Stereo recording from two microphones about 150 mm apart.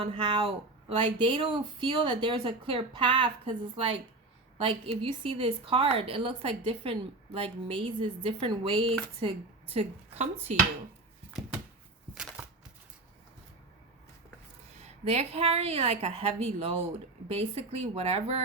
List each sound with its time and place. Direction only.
0.0 s speech: 35° right (ahead or behind)
12.1 s a sound: 5° right (ahead or behind)
15.0 s speech: 45° right (ahead or behind)